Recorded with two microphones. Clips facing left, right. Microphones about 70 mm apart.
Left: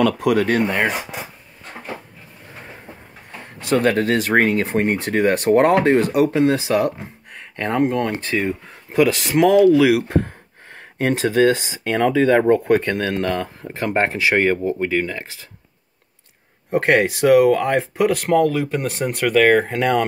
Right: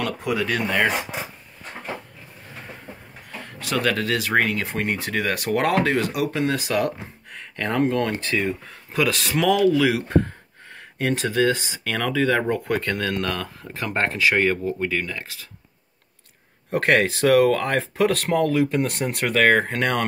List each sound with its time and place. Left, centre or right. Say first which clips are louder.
0.2 s speech: left 7 dB; left
3.4 s speech: left 6 dB; left
16.7 s speech: left 3 dB; centre
18.3 s speech: left 3 dB; centre